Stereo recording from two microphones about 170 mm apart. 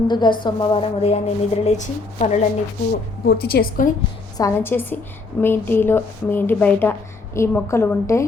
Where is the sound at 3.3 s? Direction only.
65° left (ahead or behind).